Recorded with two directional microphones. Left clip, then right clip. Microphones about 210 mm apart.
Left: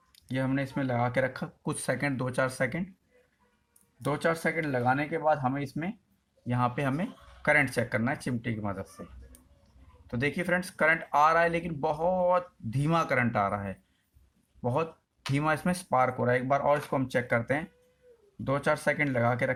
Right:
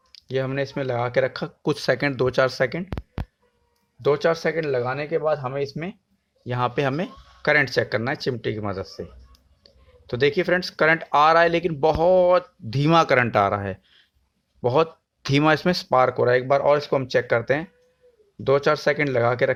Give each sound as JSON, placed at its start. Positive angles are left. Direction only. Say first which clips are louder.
{"t": 0.3, "sound": "speech", "louder": "right 6 dB", "side_deg": -45}
{"t": 4.1, "sound": "speech", "louder": "right 7 dB", "side_deg": -40}
{"t": 10.1, "sound": "speech", "louder": "right 9 dB", "side_deg": -45}